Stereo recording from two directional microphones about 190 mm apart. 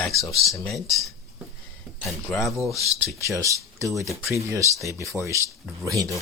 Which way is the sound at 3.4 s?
15° right (ahead or behind).